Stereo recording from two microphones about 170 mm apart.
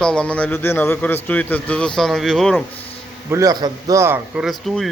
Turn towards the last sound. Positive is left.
turn(degrees=0)  # may be behind; listen again after turning